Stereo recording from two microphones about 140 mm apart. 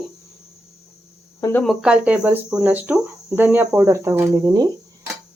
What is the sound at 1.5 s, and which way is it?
Speech, centre (ahead or behind).